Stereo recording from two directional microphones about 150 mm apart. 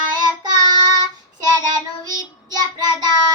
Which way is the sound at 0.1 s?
30° right (ahead or behind).